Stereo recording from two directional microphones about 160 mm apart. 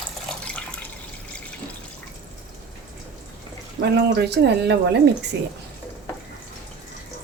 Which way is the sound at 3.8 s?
90° right.